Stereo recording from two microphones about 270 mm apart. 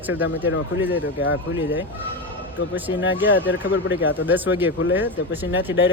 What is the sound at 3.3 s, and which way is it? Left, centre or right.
Speech, centre.